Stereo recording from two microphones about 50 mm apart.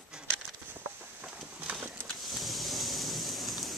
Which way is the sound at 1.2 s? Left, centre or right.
Right.